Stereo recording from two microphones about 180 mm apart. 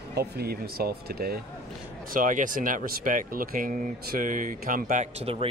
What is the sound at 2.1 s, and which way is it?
Speech, 45° right (ahead or behind).